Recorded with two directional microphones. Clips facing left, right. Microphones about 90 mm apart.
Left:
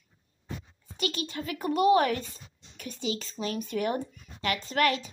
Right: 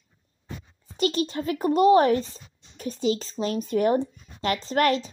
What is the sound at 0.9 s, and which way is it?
A child's voice, 35° right (ahead or behind).